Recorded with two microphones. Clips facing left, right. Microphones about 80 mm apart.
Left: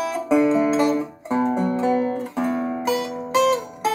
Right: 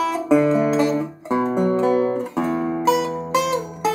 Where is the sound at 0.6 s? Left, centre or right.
Centre.